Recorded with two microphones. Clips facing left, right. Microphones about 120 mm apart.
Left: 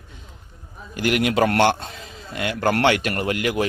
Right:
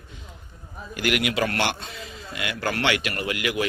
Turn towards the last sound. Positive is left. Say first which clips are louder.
# left 4 dB
turn(degrees=45)  # may be behind; listen again after turning